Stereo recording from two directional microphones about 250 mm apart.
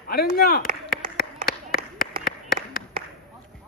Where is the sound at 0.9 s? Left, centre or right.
Left.